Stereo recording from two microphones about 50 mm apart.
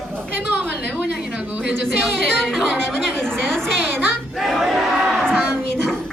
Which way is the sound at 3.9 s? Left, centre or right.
Right.